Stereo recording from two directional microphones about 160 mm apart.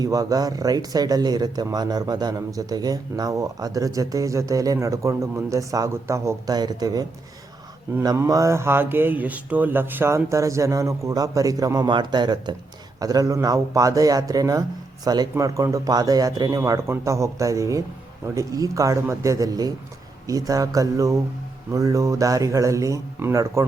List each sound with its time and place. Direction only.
0.0 s speech: 20° right (ahead or behind)